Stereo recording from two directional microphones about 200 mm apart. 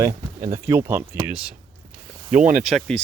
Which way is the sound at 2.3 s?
40° right (ahead or behind).